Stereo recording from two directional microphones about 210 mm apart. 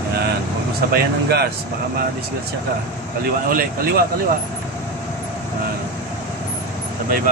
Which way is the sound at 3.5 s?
45° right (ahead or behind).